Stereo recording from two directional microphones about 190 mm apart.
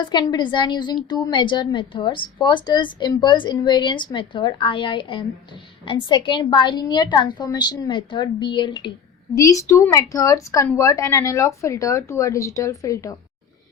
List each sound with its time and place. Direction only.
0.0 s a woman's voice: 25° left (ahead or behind)